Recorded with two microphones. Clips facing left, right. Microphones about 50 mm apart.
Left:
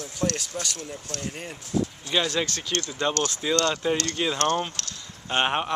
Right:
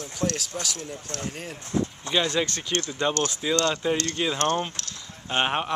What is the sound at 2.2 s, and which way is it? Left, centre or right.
Speech, right.